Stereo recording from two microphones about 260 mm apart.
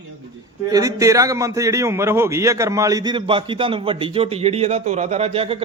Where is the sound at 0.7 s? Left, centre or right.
Centre.